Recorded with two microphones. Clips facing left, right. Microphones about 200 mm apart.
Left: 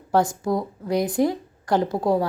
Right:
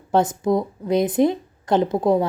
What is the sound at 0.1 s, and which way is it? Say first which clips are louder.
Speech: right 3 dB; 20° right (ahead or behind).